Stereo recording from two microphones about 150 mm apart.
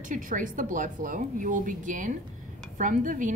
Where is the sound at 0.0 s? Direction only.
60° right (ahead or behind).